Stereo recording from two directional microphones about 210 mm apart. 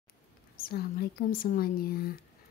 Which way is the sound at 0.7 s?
45° left (ahead or behind).